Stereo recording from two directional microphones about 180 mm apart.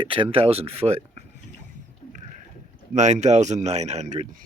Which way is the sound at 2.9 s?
40° right (ahead or behind).